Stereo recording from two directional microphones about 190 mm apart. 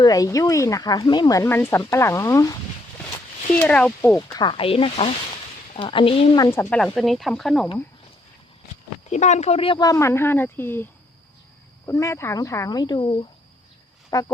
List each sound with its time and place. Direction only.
0.0 s speech: 20° left (ahead or behind)
3.6 s speech: 5° left (ahead or behind)
4.2 s speech: 20° left (ahead or behind); by 7.7 s centre (ahead or behind)
9.0 s speech: 40° left (ahead or behind); by 10.8 s 10° left (ahead or behind)
11.9 s speech: 15° left (ahead or behind)